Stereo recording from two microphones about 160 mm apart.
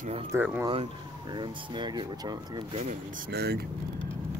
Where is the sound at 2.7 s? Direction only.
45° right (ahead or behind).